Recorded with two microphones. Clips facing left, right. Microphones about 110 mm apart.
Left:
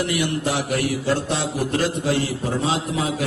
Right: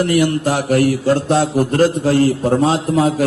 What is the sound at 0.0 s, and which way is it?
Speech, 45° right (ahead or behind).